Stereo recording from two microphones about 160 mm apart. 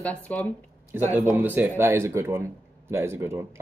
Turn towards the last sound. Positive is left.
turn(degrees=-15)  # may be behind; listen again after turning